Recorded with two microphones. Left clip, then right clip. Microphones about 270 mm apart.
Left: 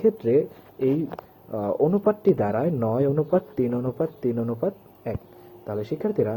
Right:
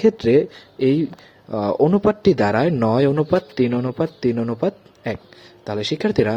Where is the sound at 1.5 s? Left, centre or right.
Right.